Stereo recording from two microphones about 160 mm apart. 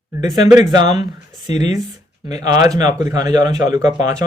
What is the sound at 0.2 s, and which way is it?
Speech, 25° right (ahead or behind).